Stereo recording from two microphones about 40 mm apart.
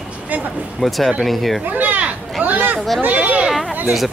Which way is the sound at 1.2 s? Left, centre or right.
Centre.